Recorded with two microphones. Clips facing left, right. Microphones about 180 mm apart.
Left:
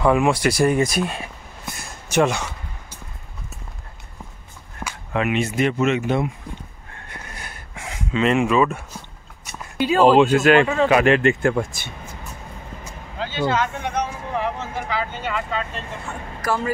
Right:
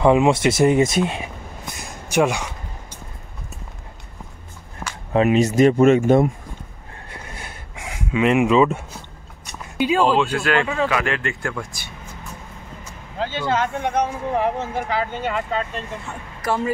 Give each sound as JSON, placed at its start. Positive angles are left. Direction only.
{"t": 0.0, "sound": "speech", "side_deg": -20}
{"t": 4.8, "sound": "a sound", "side_deg": 0}
{"t": 5.1, "sound": "speech", "side_deg": -35}
{"t": 7.1, "sound": "a sound", "side_deg": -25}
{"t": 7.7, "sound": "speech", "side_deg": -10}
{"t": 10.0, "sound": "speech", "side_deg": 15}
{"t": 13.2, "sound": "speech", "side_deg": -45}
{"t": 16.3, "sound": "speech", "side_deg": -25}